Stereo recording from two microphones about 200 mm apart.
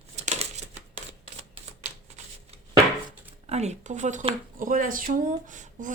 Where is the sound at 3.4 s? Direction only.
35° right (ahead or behind).